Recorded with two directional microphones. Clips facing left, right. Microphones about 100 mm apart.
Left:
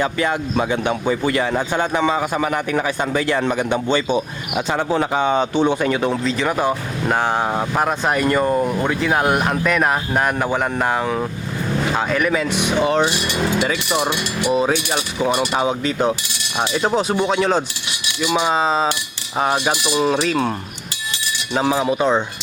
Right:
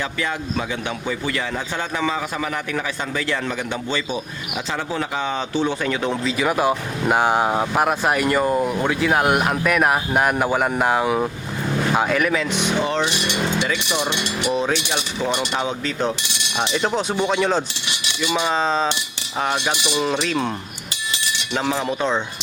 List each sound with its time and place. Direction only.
1.4 s speech: 45° left (ahead or behind)
1.8 s speech: 25° left (ahead or behind)
2.8 s speech: 45° left (ahead or behind)
3.8 s speech: 25° left (ahead or behind)
5.5 s speech: 15° left (ahead or behind)
6.1 s speech: 5° right (ahead or behind)
18.2 s speech: 15° left (ahead or behind)
21.5 s speech: 10° left (ahead or behind)